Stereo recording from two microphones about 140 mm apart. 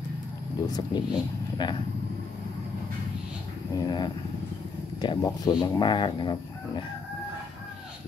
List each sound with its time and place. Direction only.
0.6 s speech: 30° left (ahead or behind)
3.7 s speech: 30° left (ahead or behind)